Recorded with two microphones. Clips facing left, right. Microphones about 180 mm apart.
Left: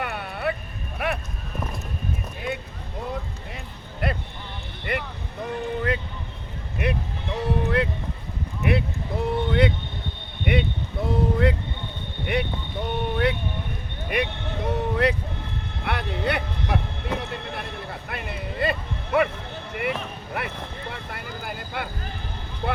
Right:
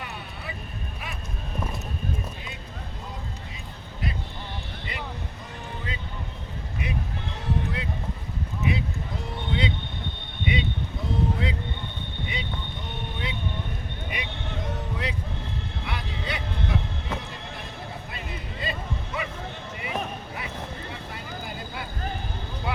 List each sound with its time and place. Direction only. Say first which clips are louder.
0.0 s vehicle: left 10 dB; 65° left (ahead or behind)
4.0 s vehicle: left 5 dB; 60° left (ahead or behind)
7.3 s horse: left 8 dB; 65° left (ahead or behind)
8.6 s a sound: left 4 dB; 60° left (ahead or behind)
12.2 s boat: left 9 dB; 60° left (ahead or behind)
14.1 s vehicle: left 10 dB; 60° left (ahead or behind)
15.8 s music: left 10 dB; 60° left (ahead or behind)
20.4 s vehicle: left 4 dB; 60° left (ahead or behind)